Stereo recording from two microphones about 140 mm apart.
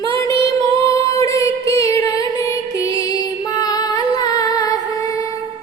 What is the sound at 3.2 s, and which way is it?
Music, 25° left (ahead or behind).